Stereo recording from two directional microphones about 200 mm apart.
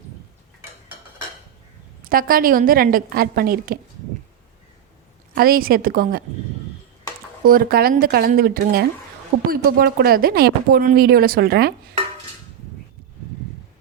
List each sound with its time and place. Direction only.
2.0 s speech: 45° right (ahead or behind)
5.3 s speech: 50° right (ahead or behind)
7.4 s speech: 45° right (ahead or behind)